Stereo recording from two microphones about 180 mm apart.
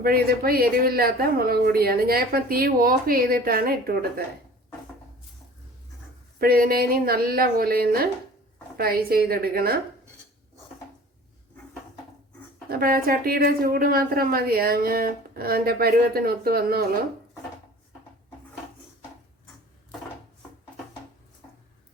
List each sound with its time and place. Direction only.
0.0 s a woman's voice: 55° right (ahead or behind)
6.4 s a woman's voice: 55° right (ahead or behind)
12.6 s a woman's voice: 55° right (ahead or behind)